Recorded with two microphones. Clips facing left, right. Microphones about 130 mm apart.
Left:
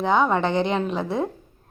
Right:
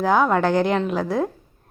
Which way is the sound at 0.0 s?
Centre (ahead or behind).